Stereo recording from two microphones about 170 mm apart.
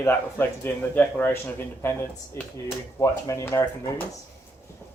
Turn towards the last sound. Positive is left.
turn(degrees=15)  # may be behind; listen again after turning